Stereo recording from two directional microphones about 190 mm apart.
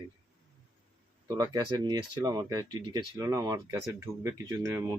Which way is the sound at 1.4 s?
20° right (ahead or behind).